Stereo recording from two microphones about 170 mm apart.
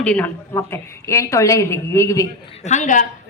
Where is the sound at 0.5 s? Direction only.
15° left (ahead or behind).